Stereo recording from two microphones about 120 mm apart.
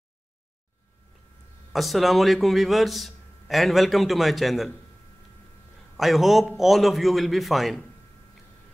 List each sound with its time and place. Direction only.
1.7 s a man's voice: centre (ahead or behind)
5.9 s a man's voice: centre (ahead or behind)